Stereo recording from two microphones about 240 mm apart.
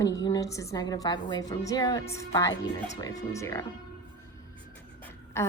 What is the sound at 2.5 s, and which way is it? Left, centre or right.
Speech, left.